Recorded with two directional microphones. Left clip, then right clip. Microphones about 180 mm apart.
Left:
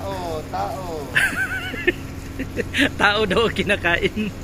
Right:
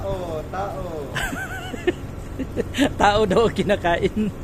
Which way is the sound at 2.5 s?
15° right (ahead or behind).